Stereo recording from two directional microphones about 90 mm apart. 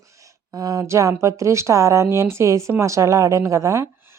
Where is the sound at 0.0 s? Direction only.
35° right (ahead or behind).